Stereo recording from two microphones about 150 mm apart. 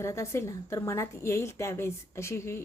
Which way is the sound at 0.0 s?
20° left (ahead or behind).